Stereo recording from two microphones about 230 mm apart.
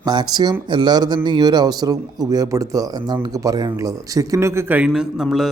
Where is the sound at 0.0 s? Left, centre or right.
Centre.